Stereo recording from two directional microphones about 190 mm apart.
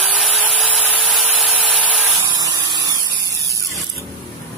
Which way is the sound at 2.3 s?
20° right (ahead or behind).